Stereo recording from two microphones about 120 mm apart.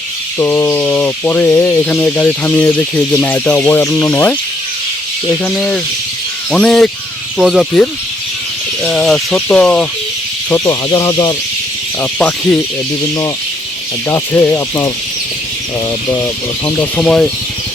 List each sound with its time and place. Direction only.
0.3 s speech: 20° left (ahead or behind)
3.7 s speech: 20° left (ahead or behind)
5.5 s speech: 5° left (ahead or behind)
10.7 s speech: 30° left (ahead or behind)
12.2 s speech: 5° left (ahead or behind)
14.1 s speech: 20° left (ahead or behind)
17.0 s speech: 10° left (ahead or behind)